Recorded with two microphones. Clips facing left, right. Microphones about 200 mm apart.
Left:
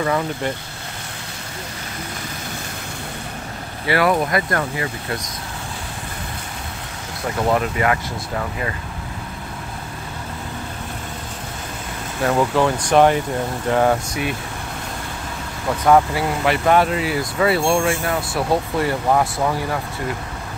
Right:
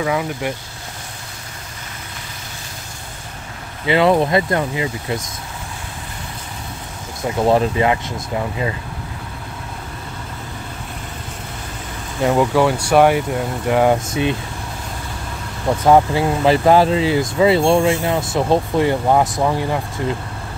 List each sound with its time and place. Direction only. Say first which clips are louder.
0.0 s speech: right 1 dB; 10° right (ahead or behind)
3.8 s speech: right 4 dB; 20° right (ahead or behind)
7.4 s speech: right 4 dB; 30° right (ahead or behind)
12.2 s speech: right 3 dB; 10° right (ahead or behind)
15.8 s speech: right 2 dB; 25° right (ahead or behind)